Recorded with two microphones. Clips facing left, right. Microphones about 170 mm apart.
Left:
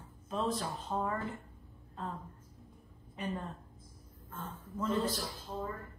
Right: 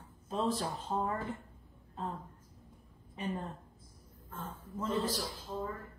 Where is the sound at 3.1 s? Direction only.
25° right (ahead or behind).